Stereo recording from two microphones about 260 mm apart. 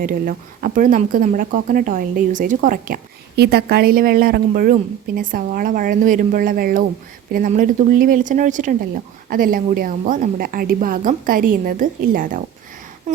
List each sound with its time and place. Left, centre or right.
0.0 s speech: right